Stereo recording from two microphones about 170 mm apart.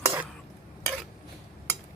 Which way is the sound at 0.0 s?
10° right (ahead or behind).